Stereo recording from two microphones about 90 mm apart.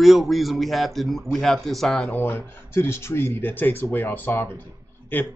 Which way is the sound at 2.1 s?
25° left (ahead or behind).